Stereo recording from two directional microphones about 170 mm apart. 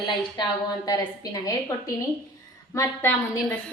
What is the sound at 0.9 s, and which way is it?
Speech, 20° left (ahead or behind).